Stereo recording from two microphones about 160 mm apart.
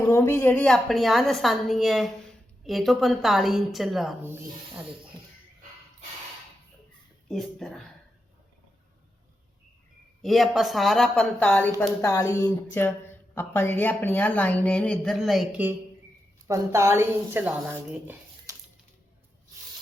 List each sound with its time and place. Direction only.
0.1 s a woman's voice: 15° left (ahead or behind); by 4.2 s centre (ahead or behind)
7.3 s a woman's voice: centre (ahead or behind)
10.2 s a woman's voice: centre (ahead or behind)
16.5 s a woman's voice: 15° right (ahead or behind)
18.5 s a sound: 20° right (ahead or behind)